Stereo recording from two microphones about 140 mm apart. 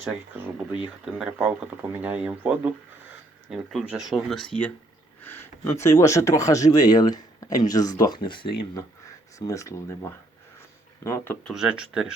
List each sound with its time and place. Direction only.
0.8 s speech: 10° right (ahead or behind); by 8.5 s 35° left (ahead or behind)
9.5 s speech: 20° left (ahead or behind)
11.4 s speech: 5° right (ahead or behind)